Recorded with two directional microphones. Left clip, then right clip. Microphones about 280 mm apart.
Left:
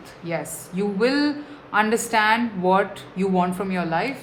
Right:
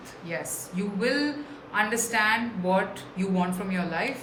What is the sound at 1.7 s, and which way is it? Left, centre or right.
A woman's voice, centre.